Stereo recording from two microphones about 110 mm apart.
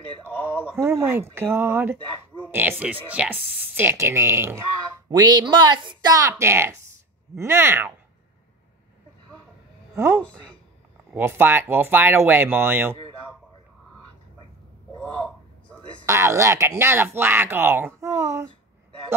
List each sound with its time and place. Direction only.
0.8 s speech: 20° right (ahead or behind)
5.1 s a woman's voice: 40° right (ahead or behind); by 7.9 s 20° right (ahead or behind)
9.9 s speech: 25° right (ahead or behind)
15.0 s a sound: 10° left (ahead or behind)
16.1 s speech: 25° right (ahead or behind)